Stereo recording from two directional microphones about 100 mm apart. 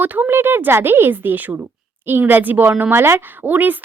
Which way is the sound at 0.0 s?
20° right (ahead or behind).